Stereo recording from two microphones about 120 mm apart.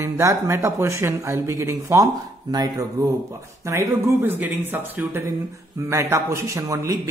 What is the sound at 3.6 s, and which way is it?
Speech, 20° right (ahead or behind).